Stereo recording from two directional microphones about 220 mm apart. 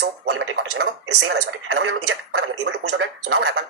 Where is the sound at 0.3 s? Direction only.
60° right (ahead or behind).